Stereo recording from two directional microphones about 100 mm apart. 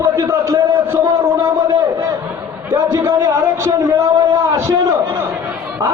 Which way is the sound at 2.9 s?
35° right (ahead or behind).